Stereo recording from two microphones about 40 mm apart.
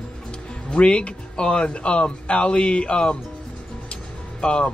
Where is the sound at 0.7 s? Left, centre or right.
Left.